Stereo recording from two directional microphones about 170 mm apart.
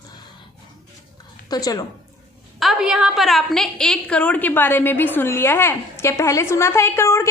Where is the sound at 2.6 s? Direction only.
Centre (ahead or behind); by 7.3 s 15° left (ahead or behind).